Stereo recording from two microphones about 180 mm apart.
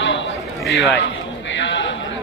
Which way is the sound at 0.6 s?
Centre (ahead or behind).